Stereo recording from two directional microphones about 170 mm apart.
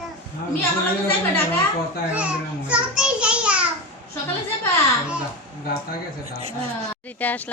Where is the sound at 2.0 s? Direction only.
5° right (ahead or behind).